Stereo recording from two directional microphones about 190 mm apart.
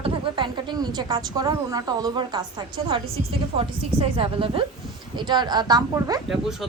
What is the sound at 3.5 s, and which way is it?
A woman's voice, 30° right (ahead or behind).